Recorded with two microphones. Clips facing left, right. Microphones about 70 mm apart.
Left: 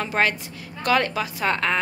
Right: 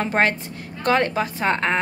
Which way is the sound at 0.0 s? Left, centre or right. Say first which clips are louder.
Right 2 dB; right.